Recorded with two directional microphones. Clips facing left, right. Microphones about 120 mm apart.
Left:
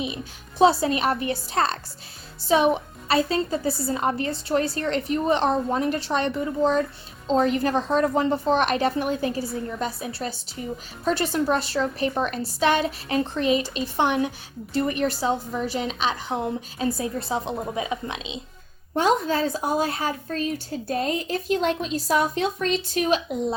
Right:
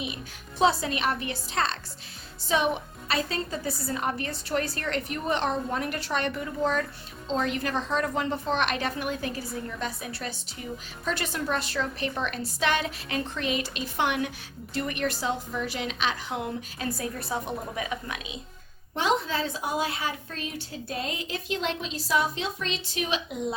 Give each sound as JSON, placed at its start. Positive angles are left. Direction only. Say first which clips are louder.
{"t": 0.6, "sound": "a woman's voice", "louder": "left 5 dB", "side_deg": 35}
{"t": 3.1, "sound": "a woman's voice", "louder": "left 7 dB", "side_deg": 35}
{"t": 7.3, "sound": "a woman's voice", "louder": "left 7 dB", "side_deg": 40}
{"t": 18.9, "sound": "a woman's voice", "louder": "left 5 dB", "side_deg": 40}